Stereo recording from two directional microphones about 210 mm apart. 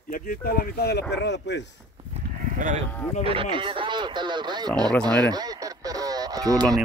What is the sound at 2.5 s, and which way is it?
Speech, 35° right (ahead or behind).